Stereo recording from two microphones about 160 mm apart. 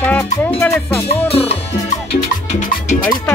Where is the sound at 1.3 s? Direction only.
35° left (ahead or behind).